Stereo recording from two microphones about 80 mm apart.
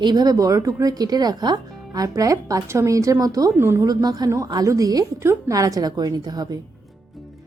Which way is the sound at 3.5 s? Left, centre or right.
Right.